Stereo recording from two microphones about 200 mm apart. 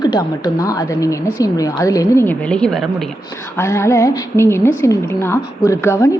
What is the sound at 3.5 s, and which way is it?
A woman's voice, 15° left (ahead or behind).